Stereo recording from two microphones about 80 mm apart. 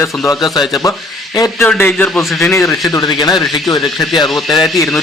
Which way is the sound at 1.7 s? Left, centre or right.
Left.